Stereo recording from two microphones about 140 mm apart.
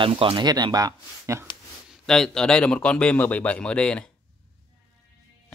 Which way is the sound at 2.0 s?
5° left (ahead or behind).